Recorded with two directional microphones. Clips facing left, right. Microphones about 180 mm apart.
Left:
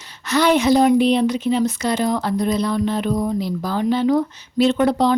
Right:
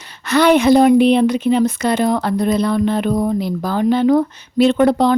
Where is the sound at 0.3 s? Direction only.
60° right (ahead or behind).